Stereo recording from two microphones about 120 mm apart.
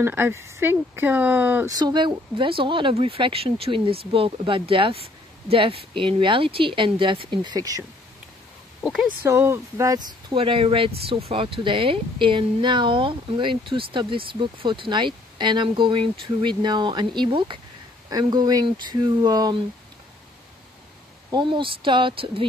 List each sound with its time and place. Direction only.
0.0 s speech: 20° right (ahead or behind)
1.7 s speech: 35° right (ahead or behind)
9.2 s speech: 20° right (ahead or behind)
10.3 s speech: 50° right (ahead or behind); by 19.6 s 35° right (ahead or behind)
21.3 s speech: 40° right (ahead or behind)